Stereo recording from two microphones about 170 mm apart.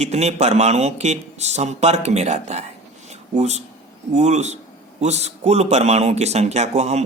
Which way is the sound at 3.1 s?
40° right (ahead or behind).